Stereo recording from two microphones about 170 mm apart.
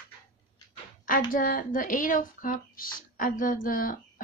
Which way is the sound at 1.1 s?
55° left (ahead or behind).